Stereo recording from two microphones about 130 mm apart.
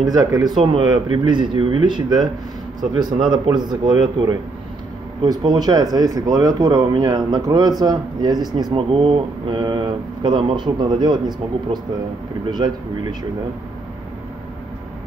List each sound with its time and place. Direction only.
0.0 s speech: 30° right (ahead or behind)
5.2 s speech: 30° right (ahead or behind)